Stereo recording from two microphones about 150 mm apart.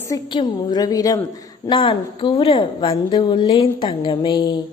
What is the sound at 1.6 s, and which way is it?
A woman's voice, 35° left (ahead or behind).